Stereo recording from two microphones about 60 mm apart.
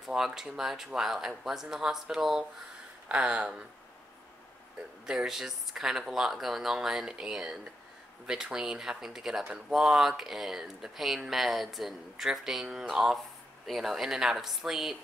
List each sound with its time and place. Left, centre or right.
0.0 s speech: centre
4.7 s speech: centre